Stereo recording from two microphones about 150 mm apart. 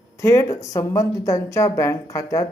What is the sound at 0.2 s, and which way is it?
A woman's voice, 20° left (ahead or behind).